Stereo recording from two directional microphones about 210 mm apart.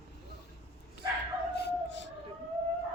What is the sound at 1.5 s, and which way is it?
Howl, 55° left (ahead or behind).